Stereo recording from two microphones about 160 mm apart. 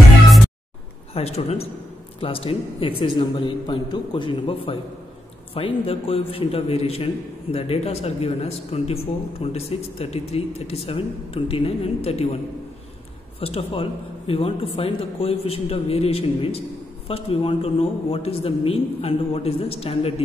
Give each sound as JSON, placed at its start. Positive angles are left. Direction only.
{"t": 1.1, "sound": "speech", "side_deg": 40}
{"t": 13.4, "sound": "speech", "side_deg": 35}